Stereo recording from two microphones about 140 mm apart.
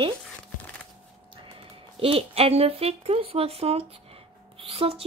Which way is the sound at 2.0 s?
45° right (ahead or behind).